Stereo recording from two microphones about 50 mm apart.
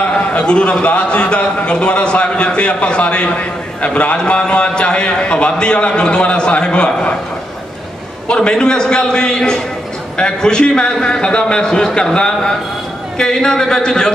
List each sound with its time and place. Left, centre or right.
0.0 s a man's voice: left
8.3 s a man's voice: centre